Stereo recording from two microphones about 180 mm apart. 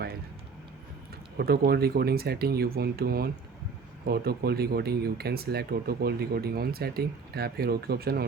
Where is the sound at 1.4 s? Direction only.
60° right (ahead or behind).